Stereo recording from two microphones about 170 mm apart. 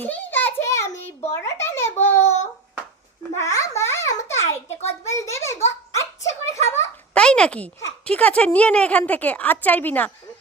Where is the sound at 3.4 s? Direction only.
15° left (ahead or behind).